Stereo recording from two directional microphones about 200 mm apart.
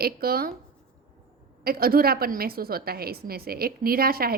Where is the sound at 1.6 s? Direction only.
50° right (ahead or behind).